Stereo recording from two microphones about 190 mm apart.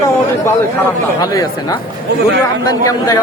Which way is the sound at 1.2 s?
20° left (ahead or behind).